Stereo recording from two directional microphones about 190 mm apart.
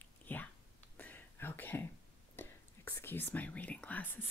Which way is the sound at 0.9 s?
10° left (ahead or behind).